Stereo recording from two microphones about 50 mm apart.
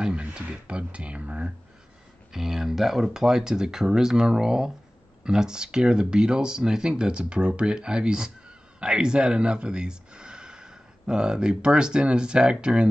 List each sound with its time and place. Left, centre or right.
0.0 s speech: right
2.3 s speech: centre